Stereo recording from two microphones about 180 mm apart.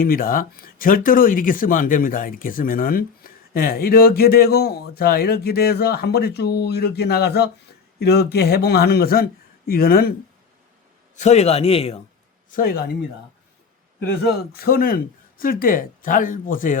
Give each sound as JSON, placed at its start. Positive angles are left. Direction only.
{"t": 0.0, "sound": "speech", "side_deg": 55}
{"t": 11.2, "sound": "a man's voice", "side_deg": 40}
{"t": 12.5, "sound": "a man's voice", "side_deg": 55}
{"t": 14.2, "sound": "a man's voice", "side_deg": 60}